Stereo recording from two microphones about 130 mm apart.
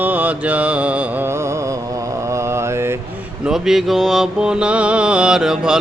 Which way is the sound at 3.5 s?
5° right (ahead or behind).